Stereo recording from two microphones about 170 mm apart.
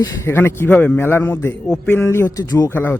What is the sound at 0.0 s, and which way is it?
A man's voice, 15° left (ahead or behind).